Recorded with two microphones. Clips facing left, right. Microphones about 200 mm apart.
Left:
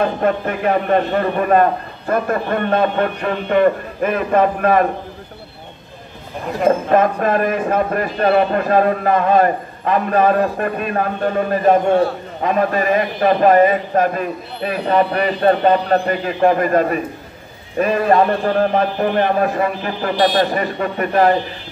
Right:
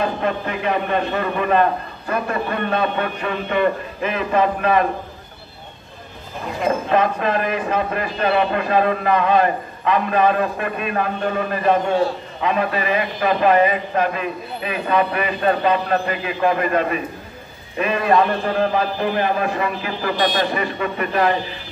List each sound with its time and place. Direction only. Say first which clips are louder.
0.2 s speech: left 5 dB; 50° left (ahead or behind)
6.6 s a man's voice: left 4 dB; 45° left (ahead or behind)